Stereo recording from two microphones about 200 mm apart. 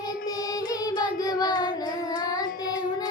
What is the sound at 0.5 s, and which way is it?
Child singing, 20° left (ahead or behind).